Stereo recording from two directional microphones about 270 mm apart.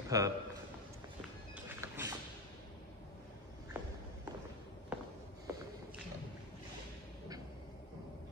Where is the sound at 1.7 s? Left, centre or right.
Centre.